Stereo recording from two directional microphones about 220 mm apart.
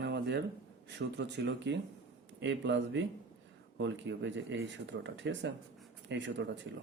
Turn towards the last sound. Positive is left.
turn(degrees=-55)  # may be behind; listen again after turning